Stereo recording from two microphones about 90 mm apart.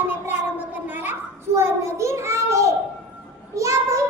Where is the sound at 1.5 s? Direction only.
30° right (ahead or behind).